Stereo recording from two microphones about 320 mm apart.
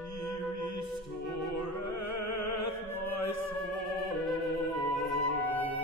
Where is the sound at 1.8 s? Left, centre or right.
Left.